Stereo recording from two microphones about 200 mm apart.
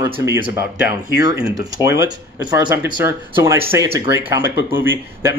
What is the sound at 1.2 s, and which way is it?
Speech, 15° right (ahead or behind).